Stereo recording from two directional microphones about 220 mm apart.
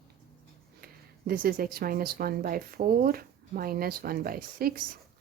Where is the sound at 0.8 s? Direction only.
40° right (ahead or behind).